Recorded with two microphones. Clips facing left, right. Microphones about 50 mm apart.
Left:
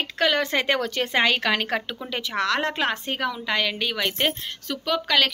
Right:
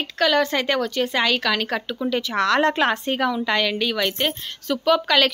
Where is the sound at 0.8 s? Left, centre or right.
Left.